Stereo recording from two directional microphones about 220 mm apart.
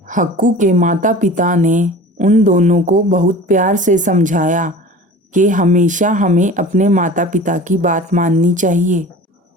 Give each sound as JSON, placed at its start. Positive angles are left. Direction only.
{"t": 0.1, "sound": "a woman's voice", "side_deg": -35}